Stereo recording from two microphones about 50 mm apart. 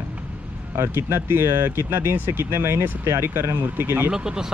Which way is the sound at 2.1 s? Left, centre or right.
Right.